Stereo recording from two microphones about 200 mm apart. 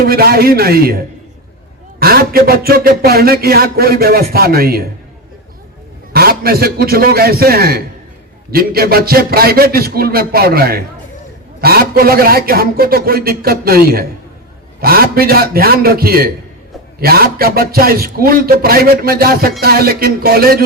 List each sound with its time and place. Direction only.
0.0 s speech: 50° right (ahead or behind)
6.1 s speech: 50° right (ahead or behind)